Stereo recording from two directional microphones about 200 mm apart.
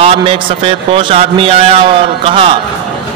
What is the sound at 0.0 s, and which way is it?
A man's voice, 30° right (ahead or behind).